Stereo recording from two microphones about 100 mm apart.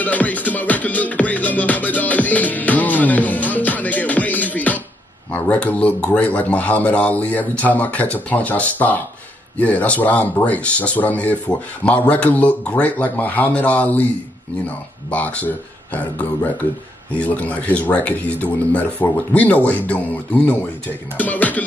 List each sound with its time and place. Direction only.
0.0 s music: 15° left (ahead or behind)
5.3 s speech: 15° left (ahead or behind)
15.0 s speech: 15° left (ahead or behind)